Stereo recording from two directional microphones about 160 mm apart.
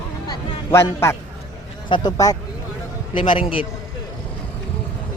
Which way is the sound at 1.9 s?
30° left (ahead or behind).